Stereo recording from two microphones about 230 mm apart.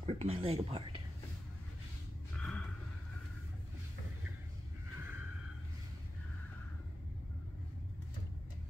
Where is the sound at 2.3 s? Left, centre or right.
Centre.